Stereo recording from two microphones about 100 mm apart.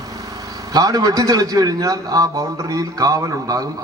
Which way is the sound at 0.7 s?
35° right (ahead or behind).